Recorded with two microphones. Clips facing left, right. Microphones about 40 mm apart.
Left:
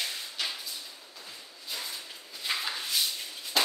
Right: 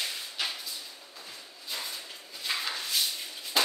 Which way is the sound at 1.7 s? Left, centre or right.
Centre.